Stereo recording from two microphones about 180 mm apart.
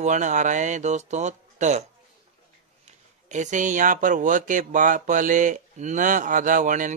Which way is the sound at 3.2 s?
40° right (ahead or behind).